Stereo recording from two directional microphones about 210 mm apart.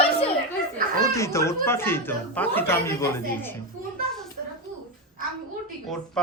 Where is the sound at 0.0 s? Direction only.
30° left (ahead or behind).